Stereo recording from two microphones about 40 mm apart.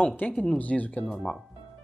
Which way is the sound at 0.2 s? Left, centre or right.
Left.